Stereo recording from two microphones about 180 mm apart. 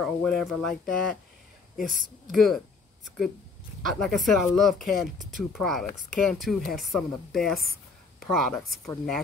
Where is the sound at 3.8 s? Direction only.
Centre (ahead or behind).